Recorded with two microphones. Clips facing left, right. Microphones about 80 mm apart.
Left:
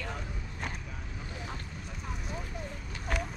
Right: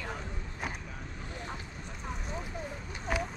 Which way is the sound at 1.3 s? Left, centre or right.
Centre.